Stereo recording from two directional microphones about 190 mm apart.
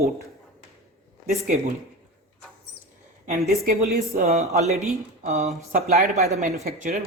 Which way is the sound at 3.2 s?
35° right (ahead or behind).